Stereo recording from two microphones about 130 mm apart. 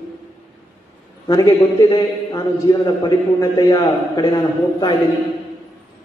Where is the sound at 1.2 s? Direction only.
30° left (ahead or behind).